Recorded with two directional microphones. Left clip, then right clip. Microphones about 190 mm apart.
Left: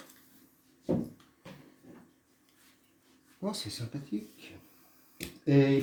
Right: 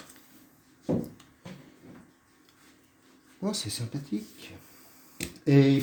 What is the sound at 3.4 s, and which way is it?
Speech, 10° right (ahead or behind).